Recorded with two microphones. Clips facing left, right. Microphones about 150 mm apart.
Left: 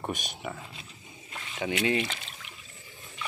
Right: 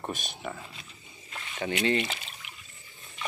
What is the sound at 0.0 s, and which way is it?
Speech, 15° left (ahead or behind).